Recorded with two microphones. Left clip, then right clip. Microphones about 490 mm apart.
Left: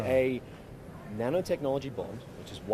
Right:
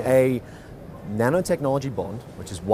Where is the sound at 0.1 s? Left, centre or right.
Right.